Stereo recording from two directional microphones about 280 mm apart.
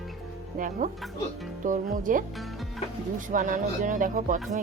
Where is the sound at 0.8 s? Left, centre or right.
Right.